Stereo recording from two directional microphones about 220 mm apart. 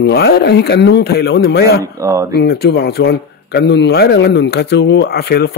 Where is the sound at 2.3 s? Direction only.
45° left (ahead or behind).